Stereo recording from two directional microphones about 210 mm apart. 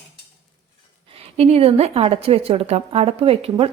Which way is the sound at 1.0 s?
30° right (ahead or behind).